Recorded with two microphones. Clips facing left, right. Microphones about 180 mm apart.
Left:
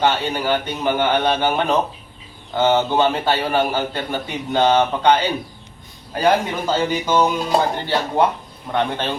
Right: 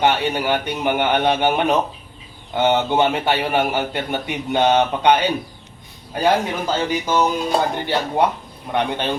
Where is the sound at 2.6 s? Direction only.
15° right (ahead or behind).